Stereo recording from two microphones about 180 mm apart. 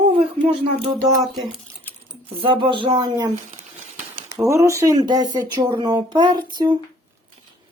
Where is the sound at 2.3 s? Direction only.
30° right (ahead or behind).